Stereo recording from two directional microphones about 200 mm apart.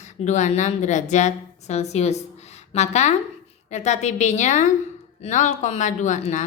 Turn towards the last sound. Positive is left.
turn(degrees=35)  # may be behind; listen again after turning